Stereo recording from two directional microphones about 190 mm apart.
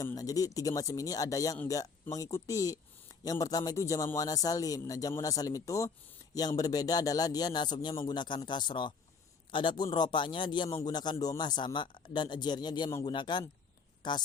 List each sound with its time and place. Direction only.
0.0 s a man's voice: 20° left (ahead or behind)